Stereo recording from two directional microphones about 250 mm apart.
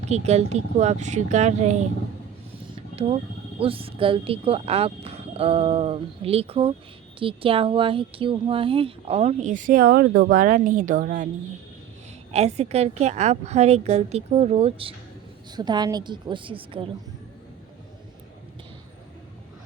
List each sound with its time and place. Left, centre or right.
0.0 s speech: right
2.9 s speech: right
12.3 s a woman's voice: right